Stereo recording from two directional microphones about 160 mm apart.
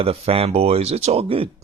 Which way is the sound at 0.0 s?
35° right (ahead or behind).